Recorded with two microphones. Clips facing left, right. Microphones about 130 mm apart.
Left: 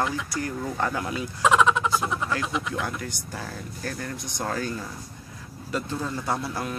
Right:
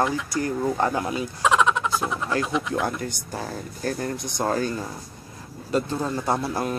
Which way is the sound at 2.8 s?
35° right (ahead or behind).